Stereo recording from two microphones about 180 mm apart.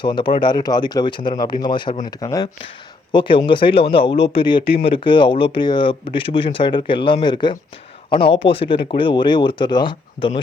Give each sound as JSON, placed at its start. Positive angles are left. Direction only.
{"t": 0.0, "sound": "speech", "side_deg": 25}